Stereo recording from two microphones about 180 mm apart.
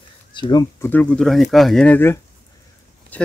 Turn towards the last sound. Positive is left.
turn(degrees=10)  # may be behind; listen again after turning